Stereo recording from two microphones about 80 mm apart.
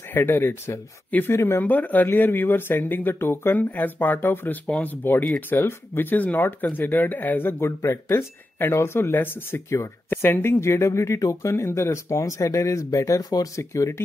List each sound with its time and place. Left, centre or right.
0.1 s speech: left
1.6 s speech: left
7.6 s speech: left
13.6 s speech: left